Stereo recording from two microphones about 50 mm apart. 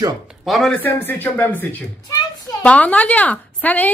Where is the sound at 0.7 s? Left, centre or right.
Left.